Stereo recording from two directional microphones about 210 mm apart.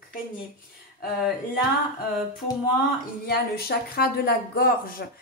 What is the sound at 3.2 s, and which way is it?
Speech, 50° left (ahead or behind).